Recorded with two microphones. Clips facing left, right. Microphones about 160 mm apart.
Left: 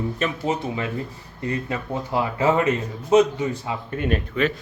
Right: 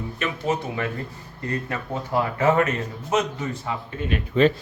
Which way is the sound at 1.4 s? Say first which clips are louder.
Left 2 dB; 15° left (ahead or behind).